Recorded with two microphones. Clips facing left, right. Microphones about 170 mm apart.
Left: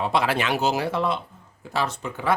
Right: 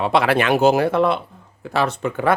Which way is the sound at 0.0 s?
70° right (ahead or behind).